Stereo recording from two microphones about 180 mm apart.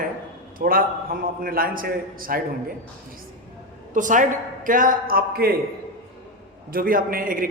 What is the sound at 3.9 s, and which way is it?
Speech, 45° right (ahead or behind).